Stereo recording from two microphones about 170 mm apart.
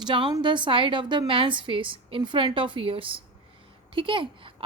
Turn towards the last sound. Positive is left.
turn(degrees=-30)  # may be behind; listen again after turning